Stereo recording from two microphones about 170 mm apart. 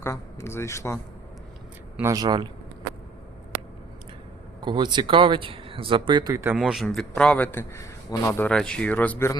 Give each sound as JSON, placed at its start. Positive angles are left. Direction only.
{"t": 0.0, "sound": "speech", "side_deg": 15}
{"t": 2.0, "sound": "speech", "side_deg": -20}
{"t": 4.6, "sound": "speech", "side_deg": -25}
{"t": 6.6, "sound": "a man's voice", "side_deg": 0}